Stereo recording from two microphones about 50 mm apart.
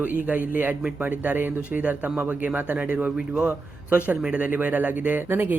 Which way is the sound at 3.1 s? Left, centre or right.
Centre.